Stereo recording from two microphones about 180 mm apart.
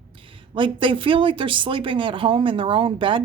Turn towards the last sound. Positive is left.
turn(degrees=-30)  # may be behind; listen again after turning